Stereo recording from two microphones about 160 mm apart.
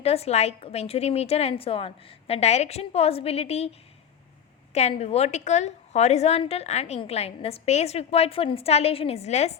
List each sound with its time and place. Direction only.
0.0 s a woman's voice: 40° left (ahead or behind)